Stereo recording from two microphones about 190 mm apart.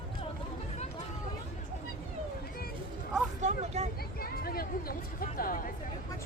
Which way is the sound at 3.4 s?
35° right (ahead or behind).